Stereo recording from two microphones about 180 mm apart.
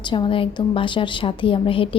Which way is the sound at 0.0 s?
25° left (ahead or behind).